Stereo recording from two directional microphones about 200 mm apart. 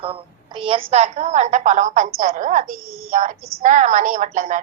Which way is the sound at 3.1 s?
40° right (ahead or behind).